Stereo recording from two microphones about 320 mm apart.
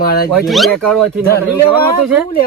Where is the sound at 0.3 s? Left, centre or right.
Centre.